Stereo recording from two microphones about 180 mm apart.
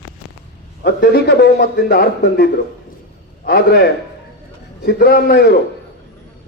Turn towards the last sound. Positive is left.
turn(degrees=60)  # may be behind; listen again after turning